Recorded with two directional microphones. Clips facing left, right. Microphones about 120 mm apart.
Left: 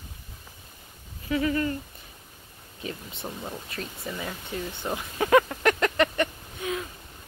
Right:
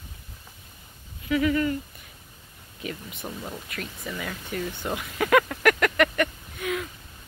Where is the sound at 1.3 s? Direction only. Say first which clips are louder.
Right 2 dB; 30° left (ahead or behind).